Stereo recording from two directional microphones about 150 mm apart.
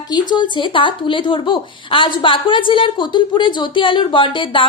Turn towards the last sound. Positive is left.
turn(degrees=35)  # may be behind; listen again after turning